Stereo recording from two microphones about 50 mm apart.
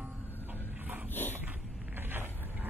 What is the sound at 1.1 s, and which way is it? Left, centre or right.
Dog, left.